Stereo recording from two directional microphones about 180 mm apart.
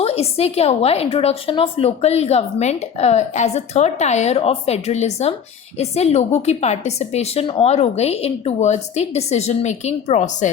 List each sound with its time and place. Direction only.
0.0 s a woman's voice: 35° left (ahead or behind)